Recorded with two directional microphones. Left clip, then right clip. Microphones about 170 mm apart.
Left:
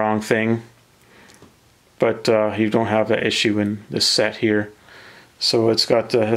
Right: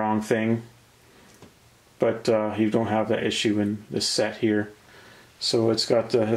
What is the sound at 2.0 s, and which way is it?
Speech, 30° left (ahead or behind).